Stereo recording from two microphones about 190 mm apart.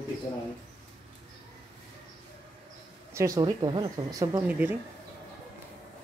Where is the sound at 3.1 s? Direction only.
20° right (ahead or behind).